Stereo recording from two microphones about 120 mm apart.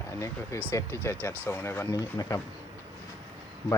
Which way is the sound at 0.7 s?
20° left (ahead or behind).